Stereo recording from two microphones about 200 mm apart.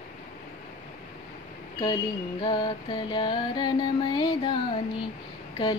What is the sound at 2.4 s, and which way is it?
Music, 20° left (ahead or behind).